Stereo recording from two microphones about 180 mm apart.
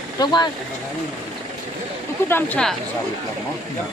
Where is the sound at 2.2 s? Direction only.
10° left (ahead or behind).